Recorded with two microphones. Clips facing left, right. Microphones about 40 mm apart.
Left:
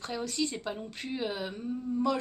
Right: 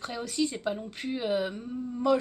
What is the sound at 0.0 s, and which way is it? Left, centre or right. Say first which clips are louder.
Speech: right 2 dB; centre.